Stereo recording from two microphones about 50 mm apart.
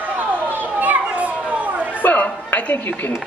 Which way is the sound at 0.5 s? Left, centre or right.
Right.